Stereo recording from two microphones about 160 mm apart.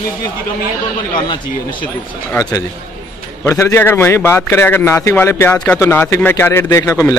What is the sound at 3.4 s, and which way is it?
A man's voice, 15° left (ahead or behind).